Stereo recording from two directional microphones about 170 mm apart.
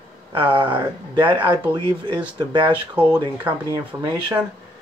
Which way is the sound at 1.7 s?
30° right (ahead or behind).